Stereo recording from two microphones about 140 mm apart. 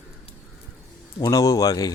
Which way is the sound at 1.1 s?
30° left (ahead or behind).